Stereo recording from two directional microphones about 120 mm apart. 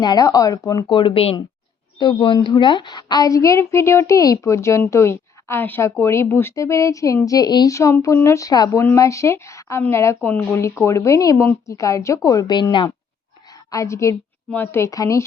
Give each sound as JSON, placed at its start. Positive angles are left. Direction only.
{"t": 0.0, "sound": "speech", "side_deg": 35}
{"t": 2.0, "sound": "a woman's voice", "side_deg": 45}
{"t": 13.7, "sound": "a woman's voice", "side_deg": 25}